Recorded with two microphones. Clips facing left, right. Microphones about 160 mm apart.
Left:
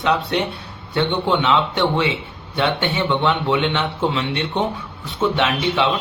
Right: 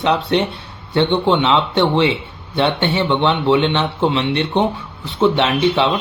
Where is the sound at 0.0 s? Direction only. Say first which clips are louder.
Right 3 dB; 30° right (ahead or behind).